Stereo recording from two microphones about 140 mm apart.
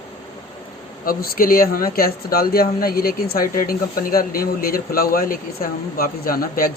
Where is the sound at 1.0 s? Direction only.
90° left.